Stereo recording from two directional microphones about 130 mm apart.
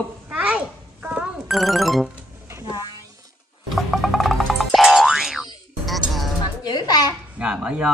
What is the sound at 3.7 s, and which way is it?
Boing, centre (ahead or behind).